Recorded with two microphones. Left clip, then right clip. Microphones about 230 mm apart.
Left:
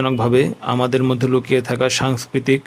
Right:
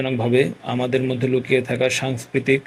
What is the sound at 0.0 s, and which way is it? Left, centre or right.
A man's voice, left.